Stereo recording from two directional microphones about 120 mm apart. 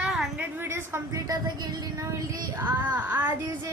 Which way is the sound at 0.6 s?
20° right (ahead or behind).